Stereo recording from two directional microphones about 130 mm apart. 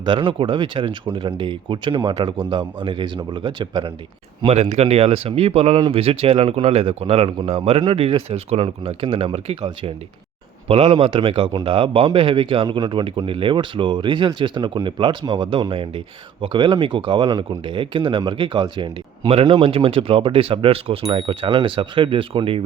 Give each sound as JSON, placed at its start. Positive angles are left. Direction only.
{"t": 0.0, "sound": "speech", "side_deg": -40}
{"t": 4.4, "sound": "speech", "side_deg": -60}
{"t": 10.7, "sound": "speech", "side_deg": -45}